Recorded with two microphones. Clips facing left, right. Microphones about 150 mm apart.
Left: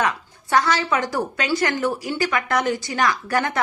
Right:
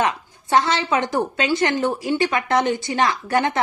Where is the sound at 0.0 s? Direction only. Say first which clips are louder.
Right 2 dB; 25° right (ahead or behind).